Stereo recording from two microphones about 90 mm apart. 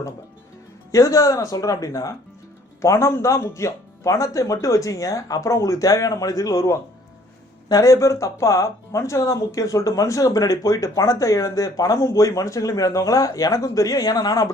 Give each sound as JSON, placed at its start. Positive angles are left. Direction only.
{"t": 0.9, "sound": "speech", "side_deg": 40}
{"t": 7.7, "sound": "speech", "side_deg": 40}